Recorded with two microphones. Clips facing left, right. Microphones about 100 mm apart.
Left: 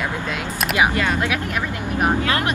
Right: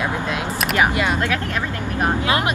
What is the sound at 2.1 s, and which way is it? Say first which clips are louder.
Speech: right 1 dB; 20° right (ahead or behind).